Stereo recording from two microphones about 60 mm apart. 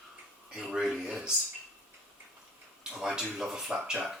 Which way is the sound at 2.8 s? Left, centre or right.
Centre.